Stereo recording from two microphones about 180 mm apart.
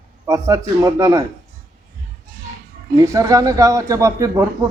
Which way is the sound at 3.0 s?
20° right (ahead or behind).